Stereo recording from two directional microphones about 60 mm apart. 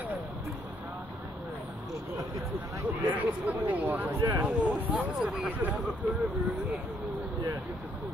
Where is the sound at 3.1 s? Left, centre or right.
Right.